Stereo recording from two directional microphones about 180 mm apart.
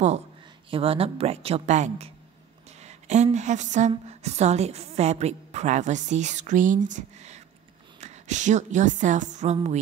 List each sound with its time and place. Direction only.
0.7 s a woman's voice: 30° right (ahead or behind)